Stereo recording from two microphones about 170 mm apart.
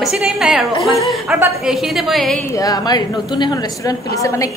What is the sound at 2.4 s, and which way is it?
A woman's voice, 20° left (ahead or behind).